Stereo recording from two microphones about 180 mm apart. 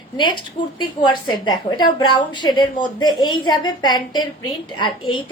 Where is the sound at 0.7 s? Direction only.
25° left (ahead or behind).